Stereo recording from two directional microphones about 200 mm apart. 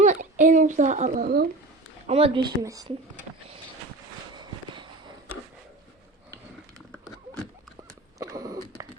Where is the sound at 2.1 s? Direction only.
30° right (ahead or behind).